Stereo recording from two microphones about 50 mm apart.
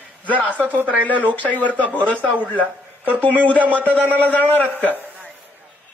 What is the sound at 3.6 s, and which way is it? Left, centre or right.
Speech, right.